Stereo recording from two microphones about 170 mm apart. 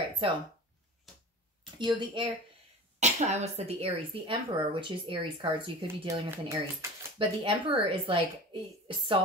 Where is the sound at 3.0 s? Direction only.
40° right (ahead or behind).